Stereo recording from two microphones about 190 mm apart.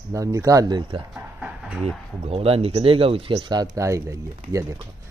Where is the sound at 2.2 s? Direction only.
30° right (ahead or behind).